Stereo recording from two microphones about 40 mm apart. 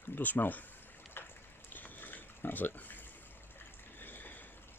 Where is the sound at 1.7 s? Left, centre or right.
Left.